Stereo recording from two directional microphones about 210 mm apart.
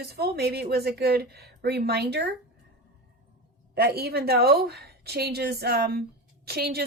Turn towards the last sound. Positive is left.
turn(degrees=-50)  # may be behind; listen again after turning